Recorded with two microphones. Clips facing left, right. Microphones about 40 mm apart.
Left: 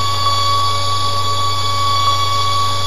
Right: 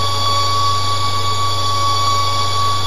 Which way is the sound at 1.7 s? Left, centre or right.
Left.